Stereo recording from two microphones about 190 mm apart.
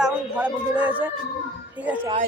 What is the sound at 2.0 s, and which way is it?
Speech, 35° right (ahead or behind).